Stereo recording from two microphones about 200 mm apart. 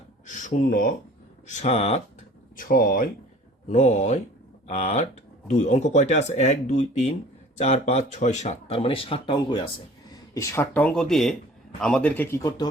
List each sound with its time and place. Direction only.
0.3 s speech: 40° left (ahead or behind)
2.6 s speech: 45° left (ahead or behind); by 12.6 s 20° left (ahead or behind)